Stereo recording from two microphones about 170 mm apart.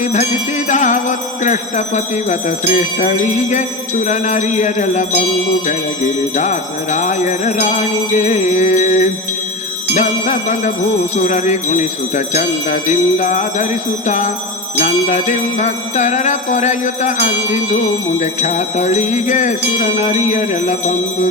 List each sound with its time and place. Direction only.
0.7 s music: 45° left (ahead or behind)
2.3 s jingle bell: 45° left (ahead or behind)
6.3 s jingle bell: 45° left (ahead or behind)
14.8 s jingle bell: 40° left (ahead or behind)